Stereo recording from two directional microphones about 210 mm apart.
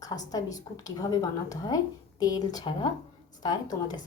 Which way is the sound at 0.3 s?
15° left (ahead or behind).